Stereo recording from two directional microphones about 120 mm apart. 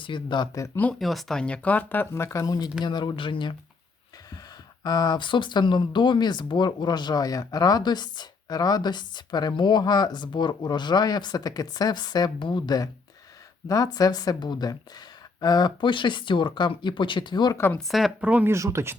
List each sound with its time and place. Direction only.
0.0 s speech: 40° left (ahead or behind)
0.9 s speech: centre (ahead or behind); by 3.5 s 45° left (ahead or behind)
4.8 s speech: 35° left (ahead or behind)
17.7 s a woman's voice: centre (ahead or behind)
18.3 s speech: 10° right (ahead or behind)
18.5 s speech: 25° right (ahead or behind)